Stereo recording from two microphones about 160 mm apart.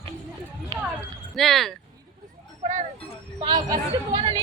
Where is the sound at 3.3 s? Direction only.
25° right (ahead or behind).